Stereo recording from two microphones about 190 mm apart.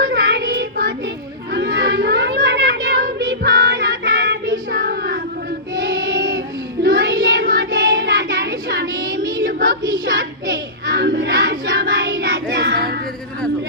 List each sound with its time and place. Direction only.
0.0 s child singing: 55° right (ahead or behind)
7.9 s child singing: 75° right (ahead or behind)
8.1 s child singing: 50° right (ahead or behind)
10.1 s a child's voice: 50° right (ahead or behind)
11.3 s child singing: 50° right (ahead or behind)